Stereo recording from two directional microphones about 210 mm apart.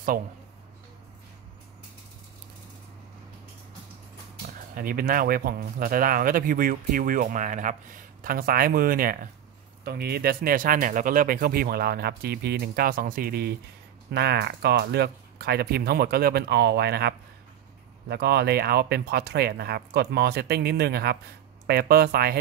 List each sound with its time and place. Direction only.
4.7 s speech: 45° right (ahead or behind)